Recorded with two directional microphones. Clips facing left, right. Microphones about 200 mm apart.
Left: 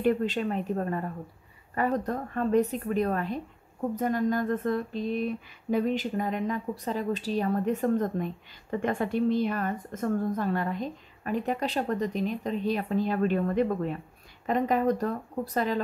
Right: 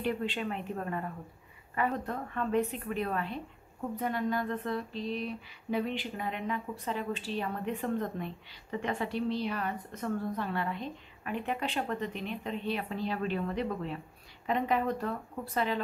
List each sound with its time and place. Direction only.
0.0 s a woman's voice: 40° left (ahead or behind)
3.9 s a sound: 45° left (ahead or behind)
14.4 s a woman's voice: 45° left (ahead or behind)